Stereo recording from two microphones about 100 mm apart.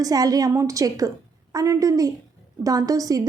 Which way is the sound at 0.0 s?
40° right (ahead or behind).